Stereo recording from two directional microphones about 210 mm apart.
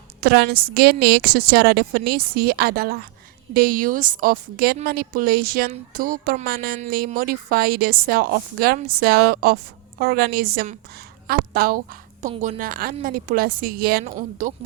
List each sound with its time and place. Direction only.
0.2 s a woman's voice: 50° right (ahead or behind)